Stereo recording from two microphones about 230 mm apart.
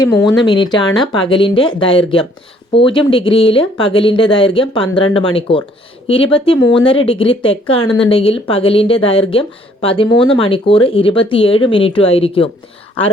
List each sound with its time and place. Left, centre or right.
0.3 s speech: centre